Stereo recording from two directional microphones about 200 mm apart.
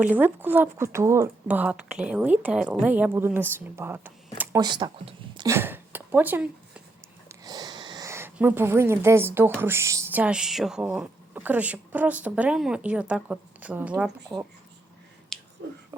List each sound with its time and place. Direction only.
0.0 s speech: 10° right (ahead or behind)
4.6 s speech: 25° right (ahead or behind); by 6.8 s 5° right (ahead or behind)
7.3 s speech: 20° right (ahead or behind)
14.3 s speech: 20° right (ahead or behind)